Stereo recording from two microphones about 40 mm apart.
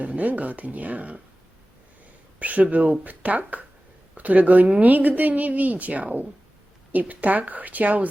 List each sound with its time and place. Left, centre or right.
0.0 s a woman's voice: right
2.4 s a woman's voice: right